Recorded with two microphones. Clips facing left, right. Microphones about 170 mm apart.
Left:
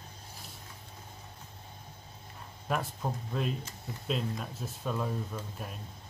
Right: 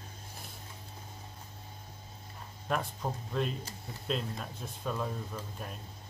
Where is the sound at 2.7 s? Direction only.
5° left (ahead or behind).